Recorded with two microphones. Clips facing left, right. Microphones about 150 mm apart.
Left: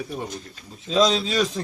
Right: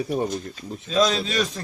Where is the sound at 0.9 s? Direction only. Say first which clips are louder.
Left 1 dB; 25° left (ahead or behind).